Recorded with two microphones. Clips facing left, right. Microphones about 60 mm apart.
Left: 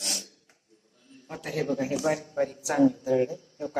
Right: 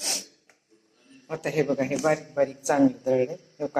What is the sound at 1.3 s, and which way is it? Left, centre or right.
A woman's voice, right.